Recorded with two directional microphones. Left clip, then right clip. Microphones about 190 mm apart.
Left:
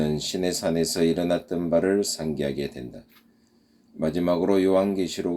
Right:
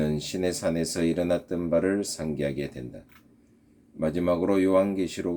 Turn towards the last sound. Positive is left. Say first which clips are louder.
# left 1 dB
turn(degrees=-45)  # may be behind; listen again after turning